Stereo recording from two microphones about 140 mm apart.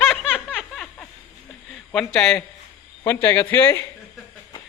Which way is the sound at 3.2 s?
20° left (ahead or behind).